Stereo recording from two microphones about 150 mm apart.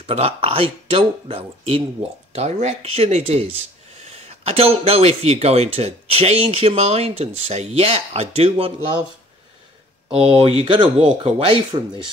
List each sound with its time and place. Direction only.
0.0 s speech: 40° right (ahead or behind)
10.0 s speech: 40° right (ahead or behind)